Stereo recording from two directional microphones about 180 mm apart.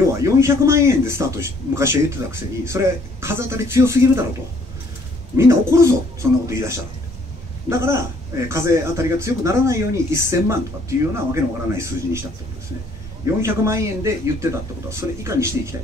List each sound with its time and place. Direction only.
0.0 s a man's voice: 15° right (ahead or behind)
5.3 s a man's voice: 15° right (ahead or behind)